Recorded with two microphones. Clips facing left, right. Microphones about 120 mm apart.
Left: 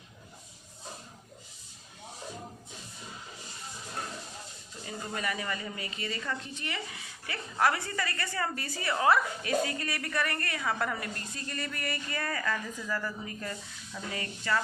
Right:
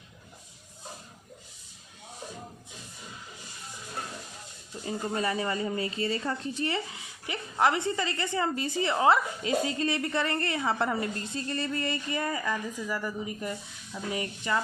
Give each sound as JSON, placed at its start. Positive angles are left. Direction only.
{"t": 4.9, "sound": "a woman's voice", "side_deg": -30}